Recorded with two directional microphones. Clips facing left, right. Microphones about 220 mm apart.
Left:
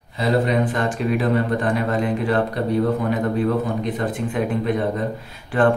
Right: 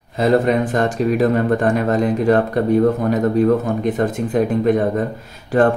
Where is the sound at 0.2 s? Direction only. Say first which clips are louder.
Right 4 dB; 45° right (ahead or behind).